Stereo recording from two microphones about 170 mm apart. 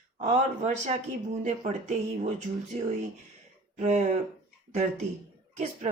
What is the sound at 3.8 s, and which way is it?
Speech, 40° right (ahead or behind).